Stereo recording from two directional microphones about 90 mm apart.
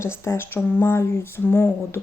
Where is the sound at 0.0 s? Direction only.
30° left (ahead or behind).